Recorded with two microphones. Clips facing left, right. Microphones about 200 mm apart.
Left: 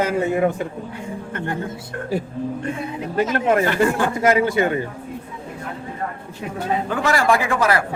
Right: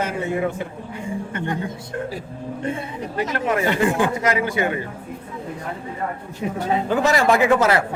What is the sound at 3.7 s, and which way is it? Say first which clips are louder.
Speech: even; 15° right (ahead or behind).